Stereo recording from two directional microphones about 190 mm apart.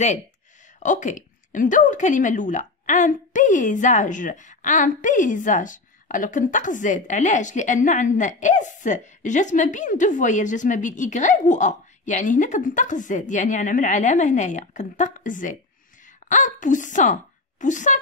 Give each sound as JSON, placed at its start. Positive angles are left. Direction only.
{"t": 0.7, "sound": "a woman's voice", "side_deg": 40}